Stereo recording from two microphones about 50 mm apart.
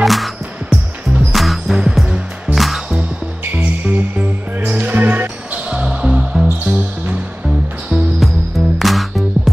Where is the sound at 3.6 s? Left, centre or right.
Right.